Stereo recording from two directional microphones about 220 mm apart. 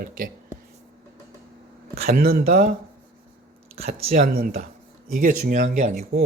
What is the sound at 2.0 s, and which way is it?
Speech, 40° right (ahead or behind).